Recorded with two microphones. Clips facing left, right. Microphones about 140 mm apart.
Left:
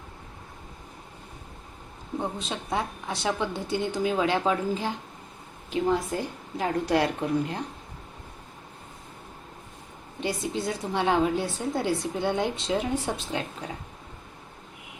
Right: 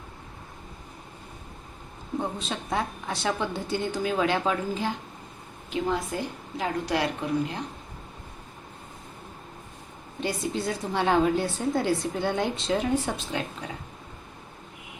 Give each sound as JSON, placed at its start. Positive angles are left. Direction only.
{"t": 2.5, "sound": "a woman's voice", "side_deg": 20}
{"t": 5.7, "sound": "speech", "side_deg": 35}
{"t": 10.2, "sound": "a woman's voice", "side_deg": 15}
{"t": 13.4, "sound": "a woman's voice", "side_deg": 30}